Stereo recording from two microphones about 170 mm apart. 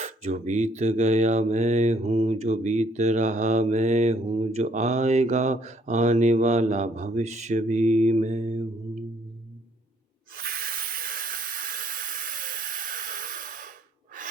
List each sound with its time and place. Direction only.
0.0 s mantra: 45° right (ahead or behind)
10.3 s hiss: 60° right (ahead or behind)